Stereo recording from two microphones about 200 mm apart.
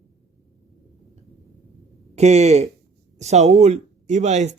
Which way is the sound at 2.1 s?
35° right (ahead or behind).